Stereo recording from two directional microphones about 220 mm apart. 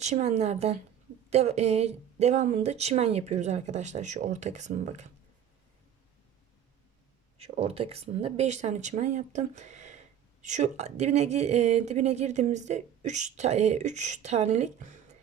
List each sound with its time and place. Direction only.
0.0 s speech: 30° right (ahead or behind)
7.3 s speech: 30° right (ahead or behind)